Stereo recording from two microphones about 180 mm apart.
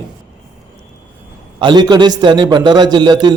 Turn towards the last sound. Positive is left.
turn(degrees=-25)  # may be behind; listen again after turning